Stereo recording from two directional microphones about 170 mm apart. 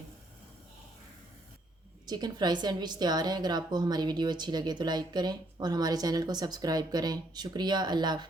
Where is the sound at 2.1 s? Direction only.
25° right (ahead or behind).